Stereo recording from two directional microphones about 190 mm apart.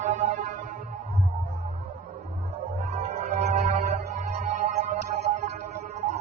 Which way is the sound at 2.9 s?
35° right (ahead or behind).